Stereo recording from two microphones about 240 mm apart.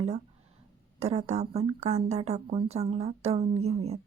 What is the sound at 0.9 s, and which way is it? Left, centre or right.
A woman's voice, right.